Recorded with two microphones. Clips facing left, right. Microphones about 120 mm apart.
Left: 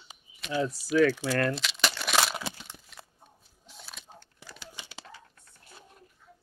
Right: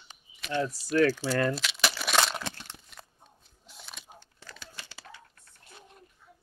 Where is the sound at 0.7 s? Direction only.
5° left (ahead or behind).